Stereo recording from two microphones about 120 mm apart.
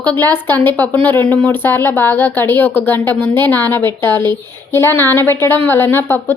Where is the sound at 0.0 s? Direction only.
15° left (ahead or behind).